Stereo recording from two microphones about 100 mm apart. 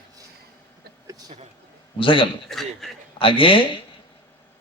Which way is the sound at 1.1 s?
40° right (ahead or behind).